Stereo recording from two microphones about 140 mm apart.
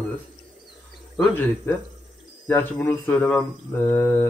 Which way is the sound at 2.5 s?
15° left (ahead or behind).